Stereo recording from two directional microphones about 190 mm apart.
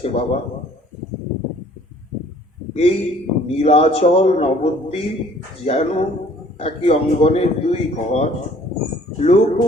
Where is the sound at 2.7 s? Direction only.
35° left (ahead or behind).